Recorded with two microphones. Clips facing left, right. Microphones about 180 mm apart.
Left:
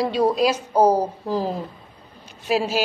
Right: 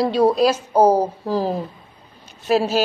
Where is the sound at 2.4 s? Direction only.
45° right (ahead or behind).